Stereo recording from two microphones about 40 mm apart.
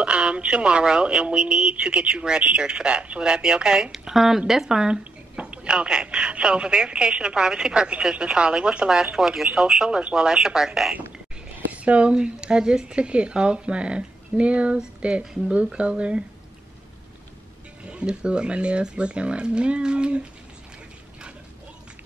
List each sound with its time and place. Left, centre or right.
0.0 s speech: right
4.1 s speech: centre
4.6 s speech: centre
9.8 s speech: right
11.5 s speech: right
17.8 s speech: right